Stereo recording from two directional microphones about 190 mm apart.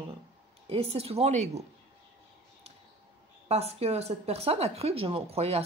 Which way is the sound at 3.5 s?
30° right (ahead or behind).